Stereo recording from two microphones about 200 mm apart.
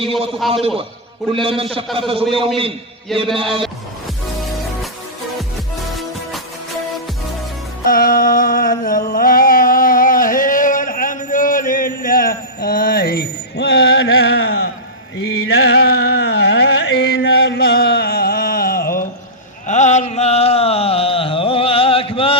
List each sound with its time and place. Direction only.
0.0 s a man's voice: 30° right (ahead or behind)
0.3 s a man's voice: centre (ahead or behind)
1.3 s a man's voice: 25° right (ahead or behind)
3.3 s a man's voice: 25° right (ahead or behind)
7.9 s a sound: 45° left (ahead or behind)
15.2 s music: 55° left (ahead or behind)
19.6 s a sound: 35° left (ahead or behind)